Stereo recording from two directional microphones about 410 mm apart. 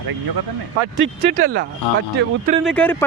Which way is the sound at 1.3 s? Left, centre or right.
Centre.